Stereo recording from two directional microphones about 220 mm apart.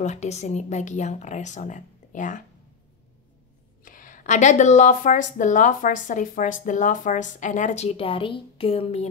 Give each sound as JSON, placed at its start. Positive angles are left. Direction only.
{"t": 0.0, "sound": "a woman's voice", "side_deg": 30}
{"t": 3.8, "sound": "a woman's voice", "side_deg": 40}